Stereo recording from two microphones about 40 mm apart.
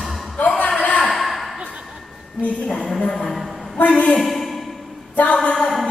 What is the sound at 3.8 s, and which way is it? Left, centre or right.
Speech, left.